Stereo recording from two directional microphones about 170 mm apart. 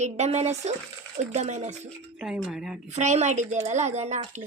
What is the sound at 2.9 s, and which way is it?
A woman's voice, 45° right (ahead or behind).